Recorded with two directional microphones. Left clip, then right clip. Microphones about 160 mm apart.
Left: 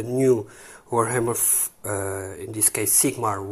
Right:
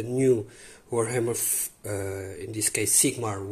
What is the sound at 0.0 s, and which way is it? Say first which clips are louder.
Speech: left 3 dB; 5° right (ahead or behind).